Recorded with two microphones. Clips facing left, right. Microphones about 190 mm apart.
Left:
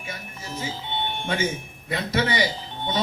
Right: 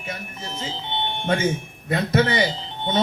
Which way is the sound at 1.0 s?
20° right (ahead or behind).